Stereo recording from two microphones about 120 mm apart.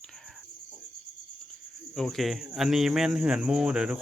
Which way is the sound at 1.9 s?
Centre (ahead or behind).